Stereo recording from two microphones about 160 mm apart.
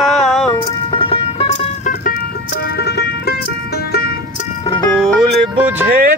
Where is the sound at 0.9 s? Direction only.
35° left (ahead or behind).